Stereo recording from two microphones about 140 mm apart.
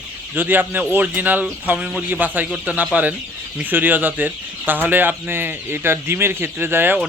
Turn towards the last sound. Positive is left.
turn(degrees=-15)  # may be behind; listen again after turning